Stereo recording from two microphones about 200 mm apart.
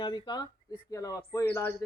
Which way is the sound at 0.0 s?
20° left (ahead or behind).